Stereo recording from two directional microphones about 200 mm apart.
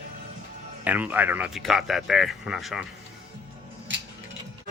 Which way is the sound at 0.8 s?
10° right (ahead or behind).